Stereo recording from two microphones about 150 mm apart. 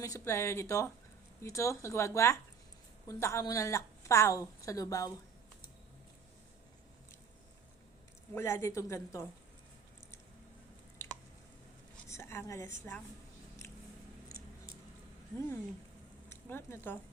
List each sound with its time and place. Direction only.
0.0 s a woman's voice: 20° left (ahead or behind)
8.4 s a woman's voice: 15° left (ahead or behind)
12.0 s a sound: 20° left (ahead or behind)
15.4 s a woman's voice: 15° left (ahead or behind)